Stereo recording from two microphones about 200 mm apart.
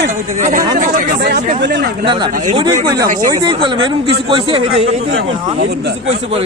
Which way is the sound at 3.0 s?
40° right (ahead or behind).